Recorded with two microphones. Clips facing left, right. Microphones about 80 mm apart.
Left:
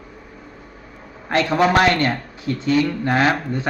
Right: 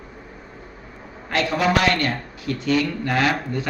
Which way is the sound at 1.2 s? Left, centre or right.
Left.